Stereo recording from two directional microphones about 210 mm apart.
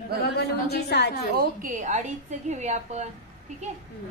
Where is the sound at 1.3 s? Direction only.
45° right (ahead or behind).